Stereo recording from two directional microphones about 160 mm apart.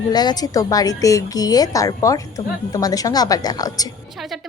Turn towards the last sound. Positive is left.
turn(degrees=25)  # may be behind; listen again after turning